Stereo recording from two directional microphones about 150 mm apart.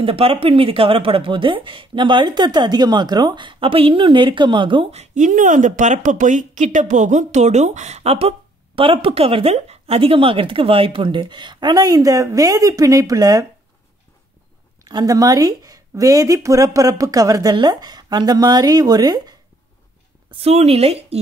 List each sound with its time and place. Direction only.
0.0 s speech: 40° right (ahead or behind)
5.0 s speech: 55° right (ahead or behind); by 13.5 s 25° right (ahead or behind)
14.9 s speech: 25° right (ahead or behind)
20.2 s speech: 40° right (ahead or behind)